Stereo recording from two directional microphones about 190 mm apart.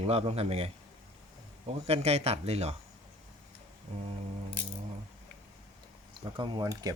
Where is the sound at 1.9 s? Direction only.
35° right (ahead or behind).